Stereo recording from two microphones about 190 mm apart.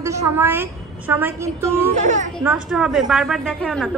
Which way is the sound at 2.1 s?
40° right (ahead or behind).